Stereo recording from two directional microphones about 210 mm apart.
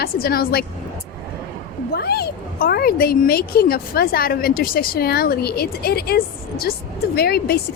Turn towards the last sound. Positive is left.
turn(degrees=50)  # may be behind; listen again after turning